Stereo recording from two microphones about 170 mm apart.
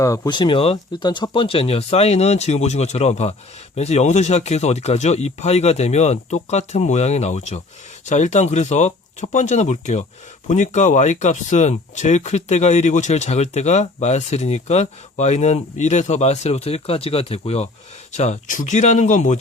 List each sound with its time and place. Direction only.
0.0 s speech: 20° left (ahead or behind); by 19.4 s 45° left (ahead or behind)